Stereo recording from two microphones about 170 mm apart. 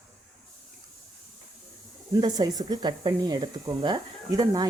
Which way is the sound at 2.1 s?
25° right (ahead or behind).